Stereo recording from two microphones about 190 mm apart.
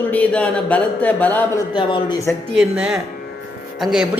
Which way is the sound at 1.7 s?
25° left (ahead or behind).